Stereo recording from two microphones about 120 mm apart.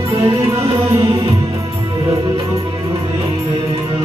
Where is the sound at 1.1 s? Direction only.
45° right (ahead or behind).